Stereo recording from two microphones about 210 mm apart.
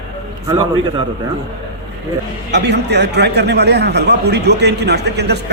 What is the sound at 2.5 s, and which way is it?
A man's voice, 55° right (ahead or behind).